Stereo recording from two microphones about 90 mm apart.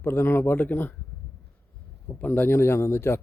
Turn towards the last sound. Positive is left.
turn(degrees=25)  # may be behind; listen again after turning